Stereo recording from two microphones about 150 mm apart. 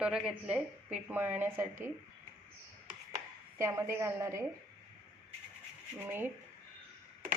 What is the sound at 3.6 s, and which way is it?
Speech, 20° right (ahead or behind).